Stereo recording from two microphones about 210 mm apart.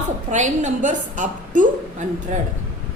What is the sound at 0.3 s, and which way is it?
A woman's voice, 35° right (ahead or behind).